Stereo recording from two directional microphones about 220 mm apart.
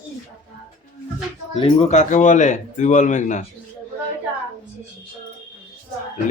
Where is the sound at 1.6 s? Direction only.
25° left (ahead or behind).